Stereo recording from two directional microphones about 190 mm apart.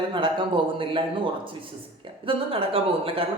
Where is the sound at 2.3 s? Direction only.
30° right (ahead or behind).